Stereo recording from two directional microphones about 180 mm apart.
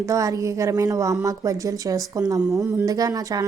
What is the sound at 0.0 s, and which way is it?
A woman's voice, 20° right (ahead or behind).